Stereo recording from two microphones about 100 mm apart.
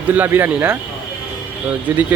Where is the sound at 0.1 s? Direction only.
20° right (ahead or behind).